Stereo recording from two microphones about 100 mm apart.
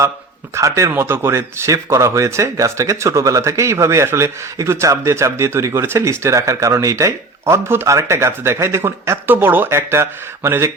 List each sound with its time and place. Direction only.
0.5 s speech: 30° right (ahead or behind)